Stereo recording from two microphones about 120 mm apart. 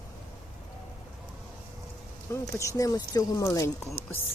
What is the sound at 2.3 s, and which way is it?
Speech, 25° left (ahead or behind).